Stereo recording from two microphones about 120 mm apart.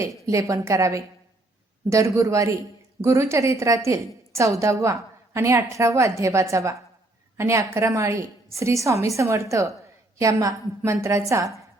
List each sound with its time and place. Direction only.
0.0 s a woman's voice: 25° right (ahead or behind)